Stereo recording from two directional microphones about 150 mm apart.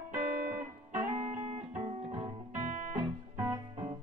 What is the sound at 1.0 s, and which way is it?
Music, 55° right (ahead or behind).